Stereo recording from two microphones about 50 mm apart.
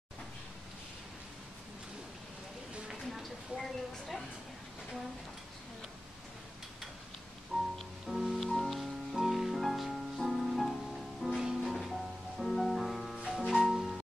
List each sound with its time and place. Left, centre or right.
2.9 s a sound: centre
7.5 s music: centre
8.4 s music: centre
13.2 s music: centre